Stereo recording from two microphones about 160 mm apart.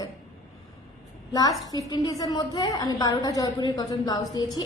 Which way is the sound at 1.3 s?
20° left (ahead or behind).